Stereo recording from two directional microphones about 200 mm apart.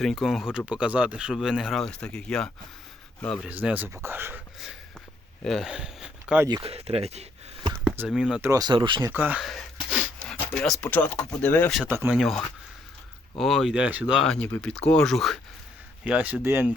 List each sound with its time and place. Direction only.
0.0 s a man's voice: centre (ahead or behind)
3.4 s speech: 5° right (ahead or behind)
6.5 s speech: 30° right (ahead or behind)
7.7 s speech: 5° right (ahead or behind); by 11.8 s 10° left (ahead or behind)
11.8 s speech: 10° right (ahead or behind)
13.4 s speech: centre (ahead or behind)